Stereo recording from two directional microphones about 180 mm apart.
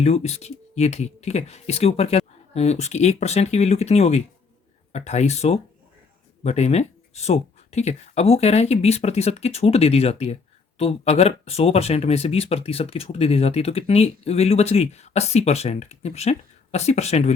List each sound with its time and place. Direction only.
0.0 s speech: 35° left (ahead or behind)